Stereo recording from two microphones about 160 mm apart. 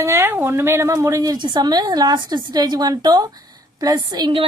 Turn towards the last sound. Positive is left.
turn(degrees=-25)  # may be behind; listen again after turning